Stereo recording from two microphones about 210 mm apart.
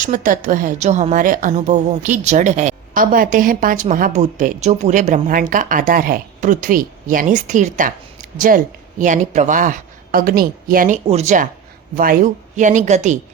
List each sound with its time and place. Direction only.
0.0 s a woman's voice: 40° right (ahead or behind)